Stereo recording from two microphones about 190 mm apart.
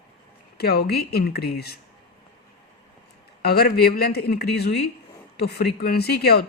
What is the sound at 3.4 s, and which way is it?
Speech, 55° left (ahead or behind).